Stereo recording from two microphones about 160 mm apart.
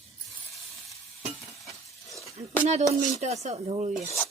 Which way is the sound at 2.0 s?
Centre (ahead or behind).